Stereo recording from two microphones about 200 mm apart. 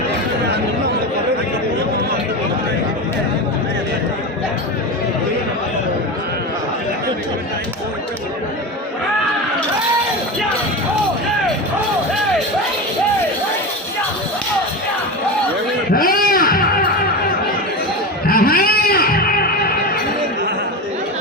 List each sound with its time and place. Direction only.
15.9 s music: 45° left (ahead or behind)
18.3 s music: 50° left (ahead or behind)